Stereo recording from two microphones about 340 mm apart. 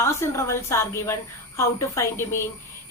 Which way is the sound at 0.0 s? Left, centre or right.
Centre.